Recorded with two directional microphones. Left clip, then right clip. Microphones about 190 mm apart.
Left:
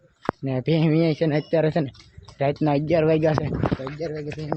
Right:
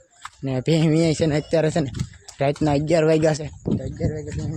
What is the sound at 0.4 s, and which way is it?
Speech, 15° right (ahead or behind).